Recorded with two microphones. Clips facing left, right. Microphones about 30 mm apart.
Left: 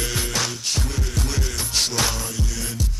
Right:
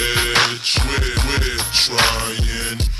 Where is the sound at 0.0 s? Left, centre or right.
Right.